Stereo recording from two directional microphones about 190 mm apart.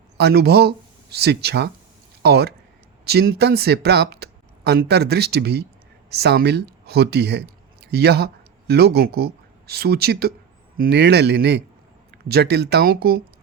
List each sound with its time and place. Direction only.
0.2 s speech: 60° right (ahead or behind)